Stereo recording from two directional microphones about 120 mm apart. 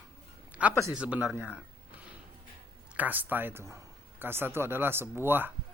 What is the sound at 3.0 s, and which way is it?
Speech, 15° right (ahead or behind).